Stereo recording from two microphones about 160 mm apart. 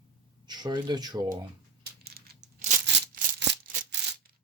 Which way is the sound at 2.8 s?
90° right.